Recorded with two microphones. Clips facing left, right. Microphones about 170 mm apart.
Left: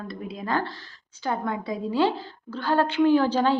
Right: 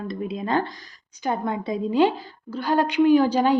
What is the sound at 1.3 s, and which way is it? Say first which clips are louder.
A woman's voice: right 2 dB; 20° right (ahead or behind).